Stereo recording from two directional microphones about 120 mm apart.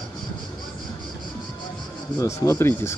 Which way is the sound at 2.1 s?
25° left (ahead or behind).